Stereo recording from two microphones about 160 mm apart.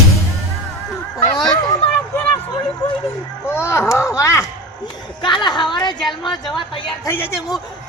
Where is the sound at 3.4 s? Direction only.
15° left (ahead or behind).